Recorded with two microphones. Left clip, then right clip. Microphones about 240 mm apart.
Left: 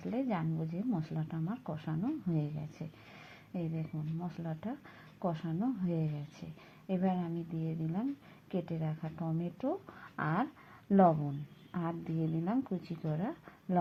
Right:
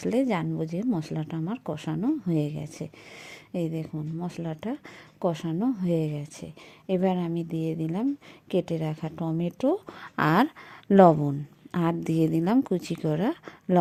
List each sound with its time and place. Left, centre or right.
0.0 s a woman's voice: right